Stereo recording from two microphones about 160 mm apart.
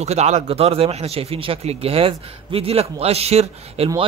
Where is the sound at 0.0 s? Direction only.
45° right (ahead or behind).